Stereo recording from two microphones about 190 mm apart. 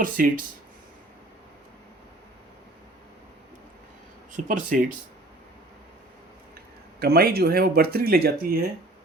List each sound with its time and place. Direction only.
0.0 s speech: 45° right (ahead or behind)
4.4 s speech: 45° right (ahead or behind)
7.0 s speech: 55° right (ahead or behind)